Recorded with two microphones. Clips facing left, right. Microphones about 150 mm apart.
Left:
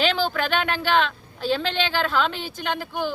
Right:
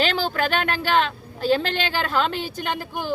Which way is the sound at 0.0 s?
40° right (ahead or behind).